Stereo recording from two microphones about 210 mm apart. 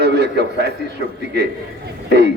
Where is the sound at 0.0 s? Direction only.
50° right (ahead or behind).